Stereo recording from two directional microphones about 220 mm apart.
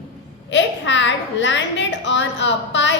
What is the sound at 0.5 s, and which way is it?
A woman's voice, 55° left (ahead or behind).